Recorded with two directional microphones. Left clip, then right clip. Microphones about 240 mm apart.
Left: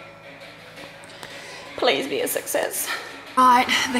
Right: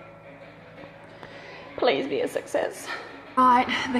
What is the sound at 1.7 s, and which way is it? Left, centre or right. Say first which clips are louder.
Speech: left 2 dB; centre.